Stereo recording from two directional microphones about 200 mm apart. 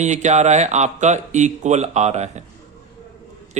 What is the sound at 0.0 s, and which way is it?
A man's voice, 35° right (ahead or behind).